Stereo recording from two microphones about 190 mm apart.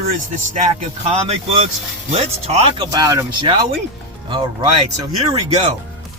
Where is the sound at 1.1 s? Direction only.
30° right (ahead or behind).